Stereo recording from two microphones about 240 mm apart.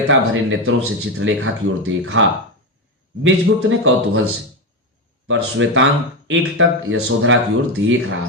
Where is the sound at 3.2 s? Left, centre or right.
Right.